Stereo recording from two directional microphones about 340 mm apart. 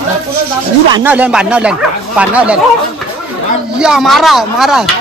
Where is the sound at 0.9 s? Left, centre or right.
Centre.